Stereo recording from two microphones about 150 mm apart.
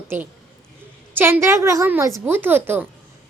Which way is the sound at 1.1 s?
15° right (ahead or behind).